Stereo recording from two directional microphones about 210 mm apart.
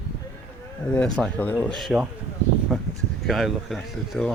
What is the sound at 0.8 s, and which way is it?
Speech, 5° left (ahead or behind).